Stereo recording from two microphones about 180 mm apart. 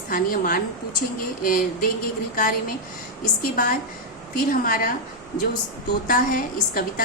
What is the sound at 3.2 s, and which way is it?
A woman's voice, 50° left (ahead or behind).